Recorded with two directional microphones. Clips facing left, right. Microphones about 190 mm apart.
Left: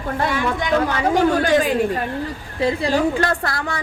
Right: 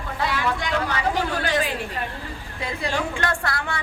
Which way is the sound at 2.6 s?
35° left (ahead or behind).